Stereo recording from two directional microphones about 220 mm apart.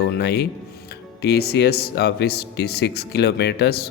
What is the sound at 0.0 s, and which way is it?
Speech, 45° left (ahead or behind).